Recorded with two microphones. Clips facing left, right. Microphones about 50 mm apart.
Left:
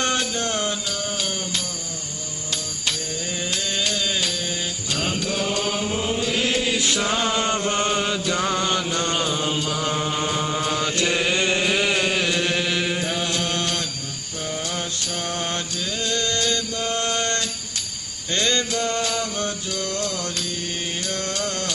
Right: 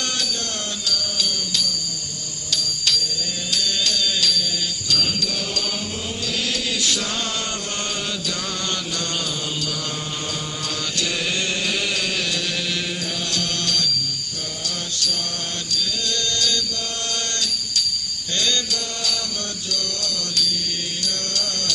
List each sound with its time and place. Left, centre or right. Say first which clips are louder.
0.9 s music: right 1 dB; left
4.9 s mantra: even; left
11.7 s music: left 4 dB; left
13.3 s mantra: left 1 dB; left
15.7 s music: even; left
18.3 s mantra: left 2 dB; left
19.7 s music: left 2 dB; left